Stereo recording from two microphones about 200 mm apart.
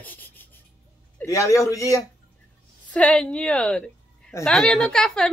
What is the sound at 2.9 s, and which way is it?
A woman's voice, 5° left (ahead or behind).